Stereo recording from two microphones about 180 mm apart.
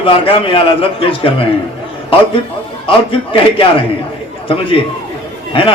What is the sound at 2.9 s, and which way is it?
Speech, 30° left (ahead or behind).